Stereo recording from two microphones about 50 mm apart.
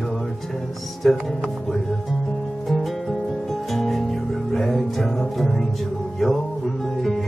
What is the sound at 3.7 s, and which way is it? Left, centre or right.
Music, centre.